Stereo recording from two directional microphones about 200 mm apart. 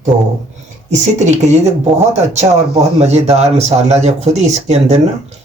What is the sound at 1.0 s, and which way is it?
Speech, 35° right (ahead or behind).